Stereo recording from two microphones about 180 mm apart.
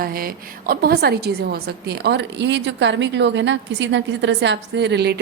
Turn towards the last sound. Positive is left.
turn(degrees=-70)  # may be behind; listen again after turning